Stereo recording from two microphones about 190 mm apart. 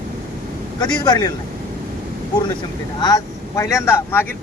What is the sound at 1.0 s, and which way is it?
Speech, 20° left (ahead or behind).